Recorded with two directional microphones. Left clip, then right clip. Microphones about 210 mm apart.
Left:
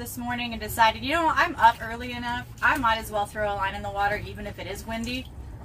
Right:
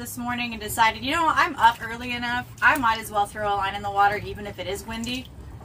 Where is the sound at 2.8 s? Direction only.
5° right (ahead or behind).